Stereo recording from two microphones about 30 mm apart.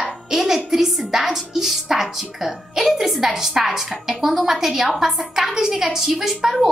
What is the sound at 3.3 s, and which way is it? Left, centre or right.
A woman's voice, centre.